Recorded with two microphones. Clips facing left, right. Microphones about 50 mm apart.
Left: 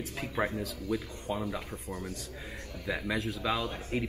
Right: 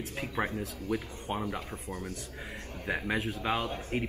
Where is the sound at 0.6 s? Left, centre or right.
Right.